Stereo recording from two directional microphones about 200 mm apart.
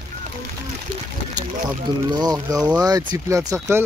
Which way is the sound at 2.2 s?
20° right (ahead or behind).